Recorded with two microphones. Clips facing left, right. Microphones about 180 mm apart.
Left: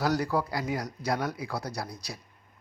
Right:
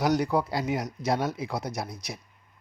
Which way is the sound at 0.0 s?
20° right (ahead or behind).